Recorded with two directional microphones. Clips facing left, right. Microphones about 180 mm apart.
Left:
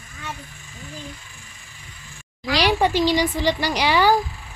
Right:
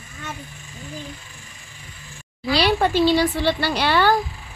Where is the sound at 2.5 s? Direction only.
10° left (ahead or behind).